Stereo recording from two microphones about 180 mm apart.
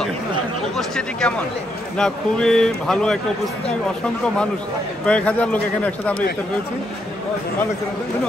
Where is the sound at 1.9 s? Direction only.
5° left (ahead or behind).